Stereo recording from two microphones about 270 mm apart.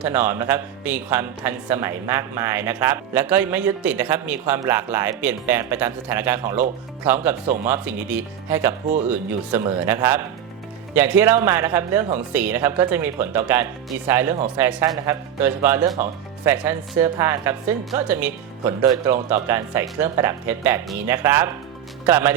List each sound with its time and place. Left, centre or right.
0.0 s speech: centre
7.4 s speech: right
7.7 s speech: centre